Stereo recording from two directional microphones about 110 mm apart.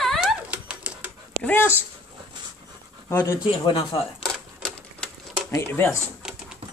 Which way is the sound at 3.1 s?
25° left (ahead or behind).